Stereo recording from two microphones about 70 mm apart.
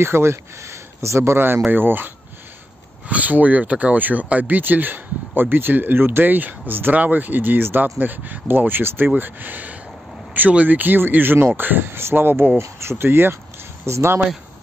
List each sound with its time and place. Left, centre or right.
0.0 s speech: right